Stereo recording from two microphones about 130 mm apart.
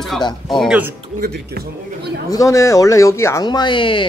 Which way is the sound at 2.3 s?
25° left (ahead or behind).